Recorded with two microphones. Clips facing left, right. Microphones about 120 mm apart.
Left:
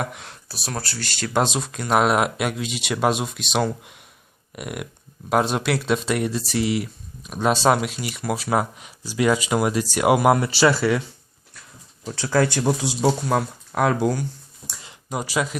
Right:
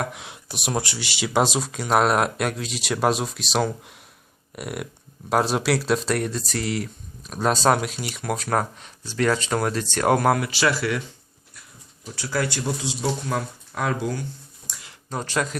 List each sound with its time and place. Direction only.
0.0 s speech: centre (ahead or behind)
0.4 s speech: 20° right (ahead or behind); by 10.3 s 10° left (ahead or behind)
10.3 s speech: 30° left (ahead or behind)
12.0 s speech: 90° left
13.3 s speech: 70° left (ahead or behind)
15.1 s speech: 10° left (ahead or behind)